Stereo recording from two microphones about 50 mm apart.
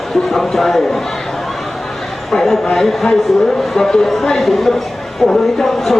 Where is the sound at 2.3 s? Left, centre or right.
Centre.